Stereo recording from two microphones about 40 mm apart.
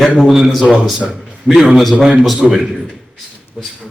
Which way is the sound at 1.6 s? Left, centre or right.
Centre.